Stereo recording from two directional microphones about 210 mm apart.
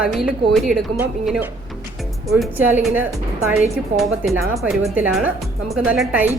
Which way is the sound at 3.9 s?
35° right (ahead or behind).